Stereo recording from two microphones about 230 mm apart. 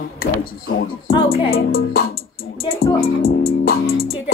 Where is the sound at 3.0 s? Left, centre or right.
Left.